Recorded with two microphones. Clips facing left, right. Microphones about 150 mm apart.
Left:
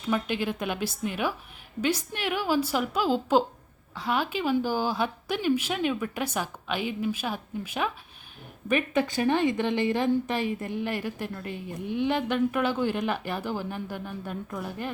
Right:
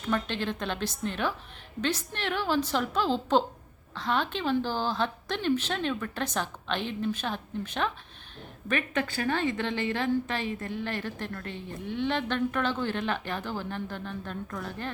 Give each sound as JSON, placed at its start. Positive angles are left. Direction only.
{"t": 0.0, "sound": "a woman's voice", "side_deg": 10}